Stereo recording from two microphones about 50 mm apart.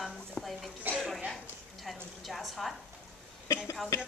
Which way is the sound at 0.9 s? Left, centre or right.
Right.